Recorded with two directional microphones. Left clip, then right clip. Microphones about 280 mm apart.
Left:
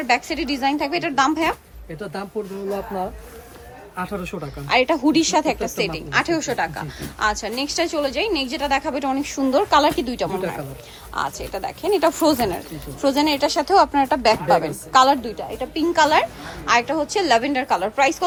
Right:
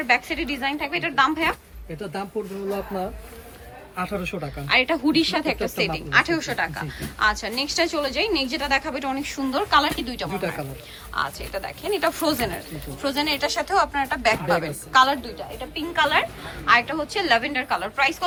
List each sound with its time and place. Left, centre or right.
0.0 s speech: centre
3.9 s speech: centre
4.7 s speech: centre